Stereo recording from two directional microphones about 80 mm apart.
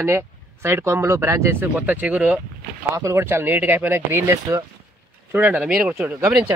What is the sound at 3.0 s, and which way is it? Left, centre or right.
Speech, right.